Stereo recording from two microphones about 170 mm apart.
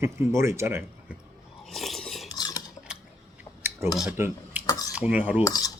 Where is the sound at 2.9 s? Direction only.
5° right (ahead or behind).